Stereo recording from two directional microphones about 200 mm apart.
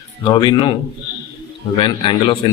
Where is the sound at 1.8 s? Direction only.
25° left (ahead or behind).